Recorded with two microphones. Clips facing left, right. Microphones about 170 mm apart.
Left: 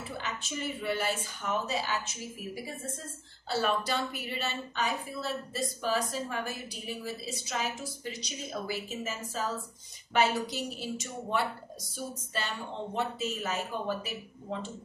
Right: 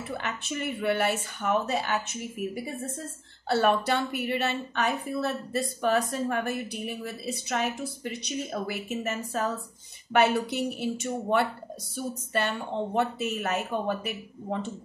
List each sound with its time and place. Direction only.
0.2 s a woman's voice: 60° right (ahead or behind)